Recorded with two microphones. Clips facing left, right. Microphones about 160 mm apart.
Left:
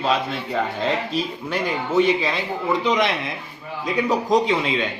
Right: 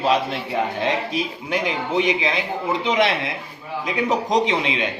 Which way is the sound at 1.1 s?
15° right (ahead or behind).